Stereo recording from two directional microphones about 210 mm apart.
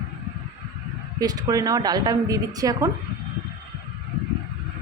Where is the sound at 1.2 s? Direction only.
15° right (ahead or behind).